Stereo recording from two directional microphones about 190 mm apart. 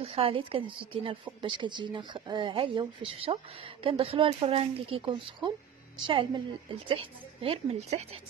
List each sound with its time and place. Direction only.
0.0 s a woman's voice: 30° right (ahead or behind)